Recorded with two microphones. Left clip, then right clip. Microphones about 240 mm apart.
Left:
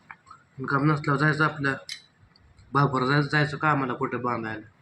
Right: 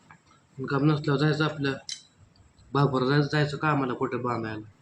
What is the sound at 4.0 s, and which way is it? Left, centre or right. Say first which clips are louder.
Speech: left 1 dB; centre.